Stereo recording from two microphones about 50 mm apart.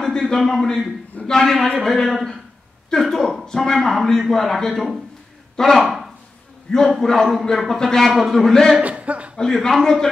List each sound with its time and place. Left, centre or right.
0.0 s a man's voice: centre
8.8 s a sound: right
9.4 s a man's voice: centre